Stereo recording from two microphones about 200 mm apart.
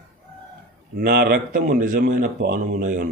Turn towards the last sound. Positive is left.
turn(degrees=-40)  # may be behind; listen again after turning